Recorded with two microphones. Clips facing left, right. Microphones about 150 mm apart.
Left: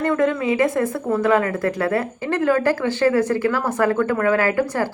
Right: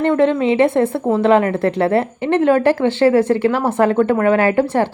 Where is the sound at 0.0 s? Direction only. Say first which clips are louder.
Right 5 dB; 25° right (ahead or behind).